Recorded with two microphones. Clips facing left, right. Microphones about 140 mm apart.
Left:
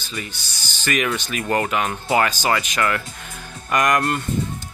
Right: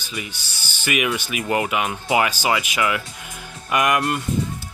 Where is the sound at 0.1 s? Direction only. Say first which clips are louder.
Even; 15° right (ahead or behind).